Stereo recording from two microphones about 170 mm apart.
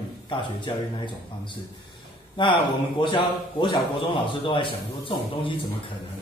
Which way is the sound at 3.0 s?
30° left (ahead or behind).